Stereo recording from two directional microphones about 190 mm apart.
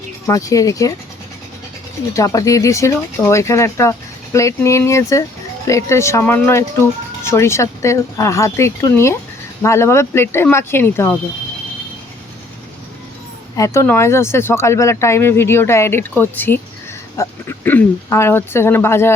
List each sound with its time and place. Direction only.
0.3 s speech: 15° left (ahead or behind)
2.1 s speech: 15° left (ahead or behind)
13.6 s speech: 15° left (ahead or behind)